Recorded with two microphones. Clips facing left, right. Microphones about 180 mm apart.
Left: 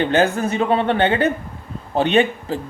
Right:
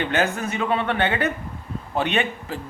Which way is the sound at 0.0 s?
30° left (ahead or behind).